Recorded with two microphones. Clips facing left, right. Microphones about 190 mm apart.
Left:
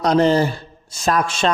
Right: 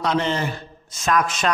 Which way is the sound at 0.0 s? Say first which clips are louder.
Left 7 dB; 40° left (ahead or behind).